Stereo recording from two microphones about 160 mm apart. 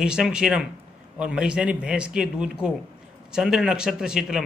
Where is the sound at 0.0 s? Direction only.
5° right (ahead or behind).